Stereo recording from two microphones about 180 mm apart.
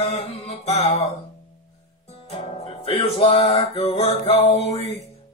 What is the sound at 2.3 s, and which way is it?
Music, 35° left (ahead or behind).